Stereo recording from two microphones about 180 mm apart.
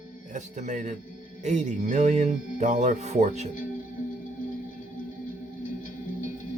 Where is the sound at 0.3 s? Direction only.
40° right (ahead or behind).